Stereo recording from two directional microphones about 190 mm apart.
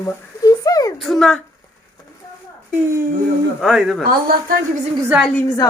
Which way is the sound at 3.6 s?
Centre (ahead or behind).